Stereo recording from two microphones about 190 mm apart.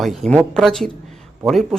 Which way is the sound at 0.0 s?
Centre (ahead or behind).